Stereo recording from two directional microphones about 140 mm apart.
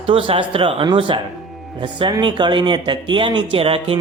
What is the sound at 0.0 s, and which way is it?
Speech, 40° right (ahead or behind).